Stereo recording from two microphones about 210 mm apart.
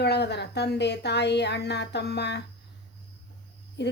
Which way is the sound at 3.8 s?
55° left (ahead or behind).